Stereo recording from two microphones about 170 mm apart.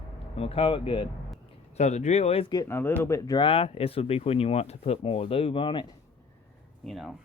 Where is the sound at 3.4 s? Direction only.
35° left (ahead or behind).